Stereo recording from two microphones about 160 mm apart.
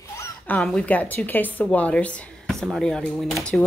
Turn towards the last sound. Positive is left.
turn(degrees=0)  # may be behind; listen again after turning